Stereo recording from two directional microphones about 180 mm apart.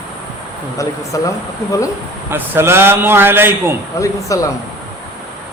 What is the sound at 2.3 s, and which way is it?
A man's voice, 15° right (ahead or behind).